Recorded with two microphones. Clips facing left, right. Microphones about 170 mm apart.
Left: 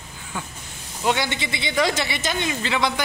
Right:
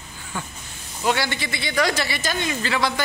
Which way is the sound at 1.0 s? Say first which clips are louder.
Even; 20° left (ahead or behind).